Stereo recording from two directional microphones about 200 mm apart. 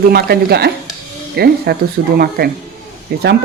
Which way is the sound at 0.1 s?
50° right (ahead or behind).